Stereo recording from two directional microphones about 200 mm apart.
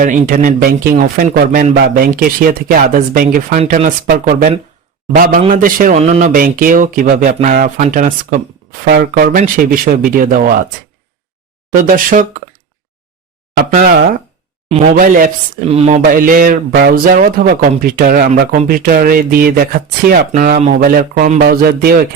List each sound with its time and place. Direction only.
0.0 s speech: 40° right (ahead or behind)
11.8 s speech: 40° right (ahead or behind)
13.6 s speech: 45° right (ahead or behind)
14.7 s speech: 35° right (ahead or behind)
15.7 s speech: 30° right (ahead or behind)
16.1 s speech: 45° right (ahead or behind)